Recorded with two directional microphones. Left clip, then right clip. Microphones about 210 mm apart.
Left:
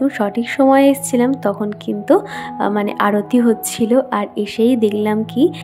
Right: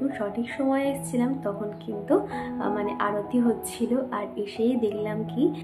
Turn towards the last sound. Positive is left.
turn(degrees=50)  # may be behind; listen again after turning